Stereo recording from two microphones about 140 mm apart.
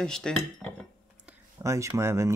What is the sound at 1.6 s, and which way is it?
Speech, 20° right (ahead or behind).